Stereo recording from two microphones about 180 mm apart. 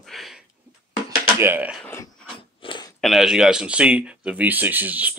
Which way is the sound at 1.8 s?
10° left (ahead or behind).